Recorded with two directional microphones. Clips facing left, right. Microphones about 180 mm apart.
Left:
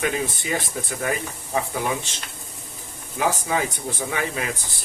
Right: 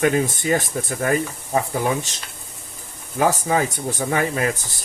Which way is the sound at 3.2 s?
45° right (ahead or behind).